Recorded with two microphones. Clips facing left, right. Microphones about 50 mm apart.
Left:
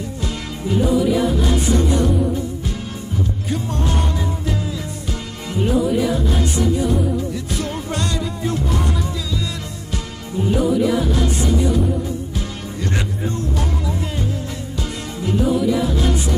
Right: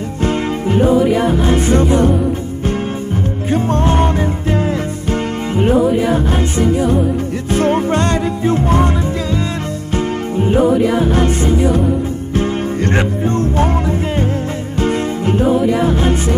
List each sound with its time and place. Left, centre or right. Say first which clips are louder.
0.2 s music: right 13 dB; right
3.5 s music: right 10 dB; right
5.6 s music: right 5 dB; right
9.9 s music: right 9 dB; right